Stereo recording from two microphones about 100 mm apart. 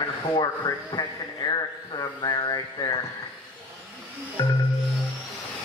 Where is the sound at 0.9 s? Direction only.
40° left (ahead or behind).